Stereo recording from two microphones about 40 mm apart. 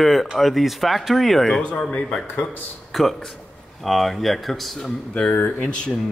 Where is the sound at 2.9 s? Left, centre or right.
Centre.